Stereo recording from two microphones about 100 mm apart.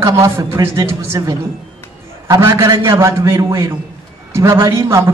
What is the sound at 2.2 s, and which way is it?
A man's voice, 30° right (ahead or behind).